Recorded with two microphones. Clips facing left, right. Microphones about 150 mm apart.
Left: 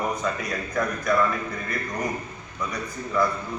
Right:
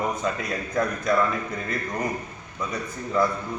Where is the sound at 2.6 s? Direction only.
25° right (ahead or behind).